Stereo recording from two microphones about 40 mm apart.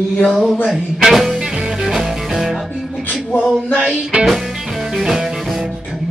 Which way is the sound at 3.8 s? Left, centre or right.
Right.